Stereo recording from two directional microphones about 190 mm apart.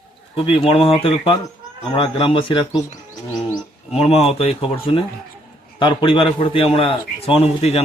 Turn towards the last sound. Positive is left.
turn(degrees=30)  # may be behind; listen again after turning